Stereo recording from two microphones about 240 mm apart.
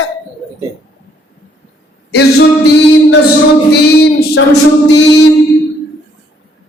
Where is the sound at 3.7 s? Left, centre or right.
Left.